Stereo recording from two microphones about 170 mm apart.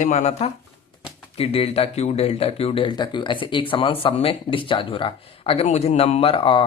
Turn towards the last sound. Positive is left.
turn(degrees=30)  # may be behind; listen again after turning